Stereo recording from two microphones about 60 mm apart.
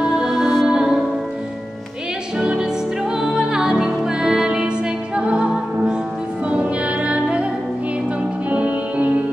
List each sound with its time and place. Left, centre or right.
0.2 s music: centre
2.3 s music: centre
8.5 s music: right